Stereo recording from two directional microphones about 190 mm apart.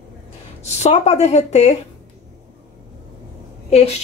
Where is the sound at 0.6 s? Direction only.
35° left (ahead or behind).